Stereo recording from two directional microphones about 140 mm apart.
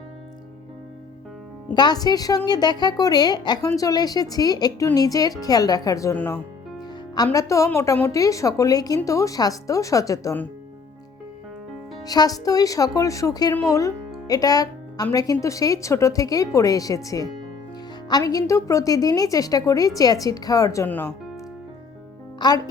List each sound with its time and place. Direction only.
1.7 s a woman's voice: 30° left (ahead or behind)
6.1 s a woman's voice: 15° left (ahead or behind)
12.0 s a woman's voice: 25° left (ahead or behind)
20.8 s speech: 15° left (ahead or behind)
22.4 s a woman's voice: 30° left (ahead or behind)